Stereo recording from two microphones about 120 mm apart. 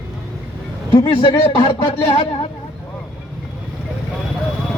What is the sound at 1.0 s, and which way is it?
Speech, 45° left (ahead or behind).